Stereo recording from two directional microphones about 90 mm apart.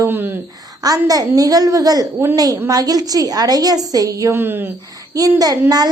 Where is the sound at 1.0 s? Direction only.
40° right (ahead or behind).